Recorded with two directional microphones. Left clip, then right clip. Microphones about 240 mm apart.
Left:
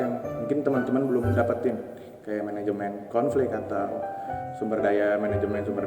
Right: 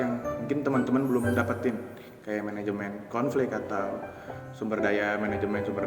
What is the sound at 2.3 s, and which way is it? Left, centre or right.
A man's voice, right.